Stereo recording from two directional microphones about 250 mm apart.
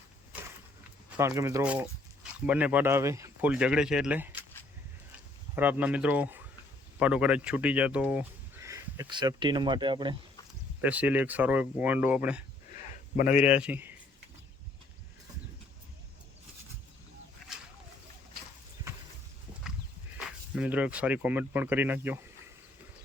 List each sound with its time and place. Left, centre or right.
1.1 s speech: centre
5.5 s speech: centre
10.8 s speech: centre
12.7 s a sound: left
13.4 s speech: centre
20.1 s speech: centre